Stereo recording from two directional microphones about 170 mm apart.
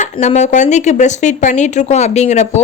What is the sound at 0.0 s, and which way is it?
A woman's voice, 45° left (ahead or behind).